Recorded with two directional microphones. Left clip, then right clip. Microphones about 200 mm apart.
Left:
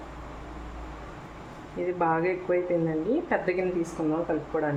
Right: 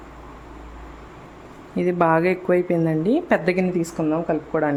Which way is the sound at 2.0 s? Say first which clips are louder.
Right 7 dB; 60° right (ahead or behind).